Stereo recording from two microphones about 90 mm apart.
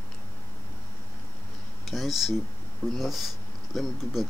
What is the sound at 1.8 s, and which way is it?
Speech, centre (ahead or behind).